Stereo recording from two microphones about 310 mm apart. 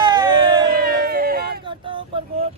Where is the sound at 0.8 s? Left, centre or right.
Right.